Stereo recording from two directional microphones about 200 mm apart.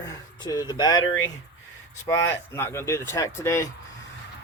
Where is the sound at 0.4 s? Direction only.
20° left (ahead or behind).